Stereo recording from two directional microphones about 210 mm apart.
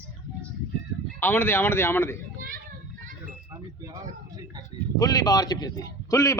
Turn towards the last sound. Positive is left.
turn(degrees=15)  # may be behind; listen again after turning